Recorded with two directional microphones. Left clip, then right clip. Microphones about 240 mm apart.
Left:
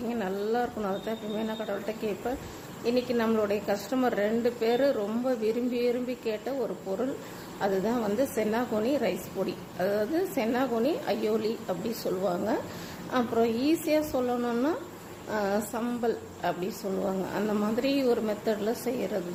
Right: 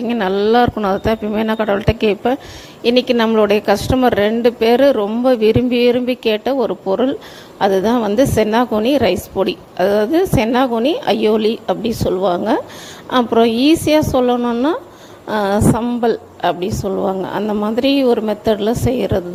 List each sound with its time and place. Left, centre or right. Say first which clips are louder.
0.1 s a woman's voice: right 16 dB; right